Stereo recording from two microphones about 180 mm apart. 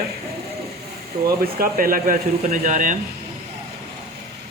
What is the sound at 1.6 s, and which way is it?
Speech, 50° right (ahead or behind).